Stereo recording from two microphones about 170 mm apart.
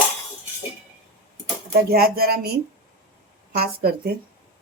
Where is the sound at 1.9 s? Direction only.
60° right (ahead or behind).